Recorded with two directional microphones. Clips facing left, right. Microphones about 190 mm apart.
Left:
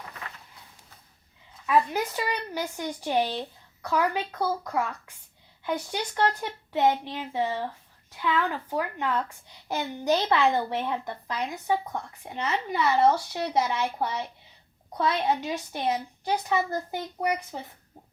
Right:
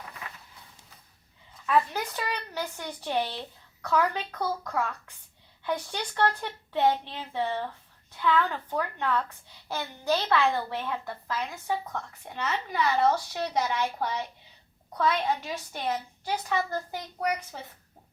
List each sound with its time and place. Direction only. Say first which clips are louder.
1.6 s a woman's voice: left 2 dB; 15° left (ahead or behind)